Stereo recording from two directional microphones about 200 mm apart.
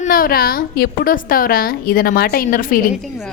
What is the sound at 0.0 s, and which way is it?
A woman's voice, 45° left (ahead or behind).